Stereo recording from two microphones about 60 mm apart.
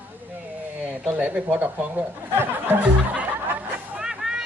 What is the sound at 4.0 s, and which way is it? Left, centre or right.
Vehicle, centre.